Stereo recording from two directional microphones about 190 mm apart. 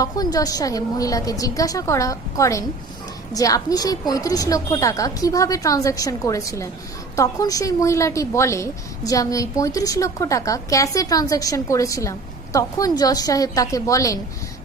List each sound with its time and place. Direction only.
0.0 s a woman's voice: 20° left (ahead or behind)